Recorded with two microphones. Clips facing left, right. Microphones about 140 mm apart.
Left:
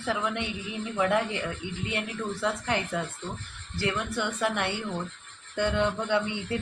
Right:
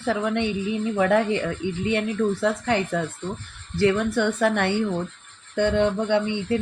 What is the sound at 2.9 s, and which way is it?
Speech, 60° right (ahead or behind).